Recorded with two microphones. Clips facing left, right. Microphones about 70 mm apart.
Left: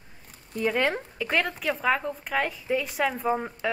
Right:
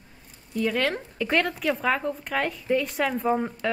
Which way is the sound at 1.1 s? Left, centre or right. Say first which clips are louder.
Right 2 dB; centre.